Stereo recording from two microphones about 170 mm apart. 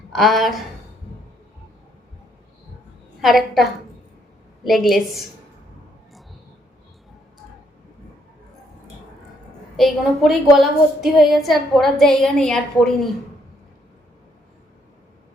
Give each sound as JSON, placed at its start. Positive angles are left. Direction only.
{"t": 0.1, "sound": "speech", "side_deg": 0}
{"t": 3.2, "sound": "a woman's voice", "side_deg": 0}
{"t": 9.7, "sound": "a woman's voice", "side_deg": 0}